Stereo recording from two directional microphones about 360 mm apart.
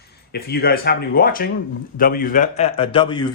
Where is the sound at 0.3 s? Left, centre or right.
Left.